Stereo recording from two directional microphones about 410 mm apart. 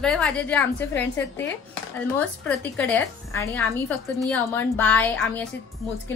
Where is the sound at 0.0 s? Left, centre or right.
Centre.